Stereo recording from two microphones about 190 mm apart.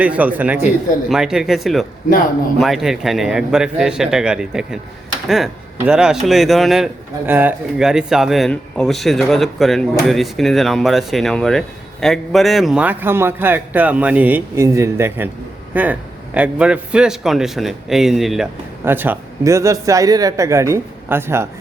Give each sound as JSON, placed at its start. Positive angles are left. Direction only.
{"t": 0.0, "sound": "a man's voice", "side_deg": -10}